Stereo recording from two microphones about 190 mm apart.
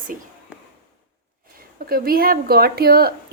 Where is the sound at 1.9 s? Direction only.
50° right (ahead or behind).